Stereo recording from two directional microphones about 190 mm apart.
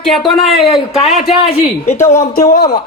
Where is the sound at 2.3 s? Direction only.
50° left (ahead or behind).